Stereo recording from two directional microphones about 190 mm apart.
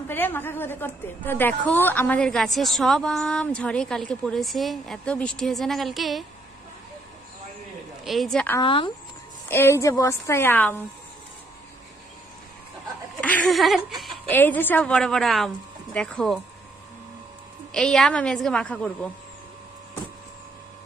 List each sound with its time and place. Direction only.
0.1 s a woman's voice: 10° left (ahead or behind)
8.0 s a woman's voice: centre (ahead or behind)
8.5 s speech: 25° left (ahead or behind)
9.5 s a woman's voice: 10° left (ahead or behind)
13.2 s speech: 10° left (ahead or behind)
14.3 s a woman's voice: 10° left (ahead or behind)
17.7 s a woman's voice: 5° left (ahead or behind)